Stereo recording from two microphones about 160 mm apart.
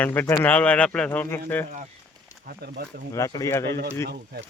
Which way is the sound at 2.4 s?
70° right (ahead or behind).